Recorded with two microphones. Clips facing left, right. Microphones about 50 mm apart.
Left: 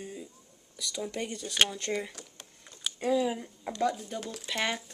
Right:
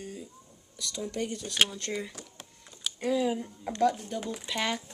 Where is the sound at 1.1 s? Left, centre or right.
Centre.